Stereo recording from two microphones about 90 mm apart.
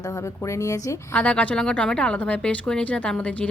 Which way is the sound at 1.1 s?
15° left (ahead or behind).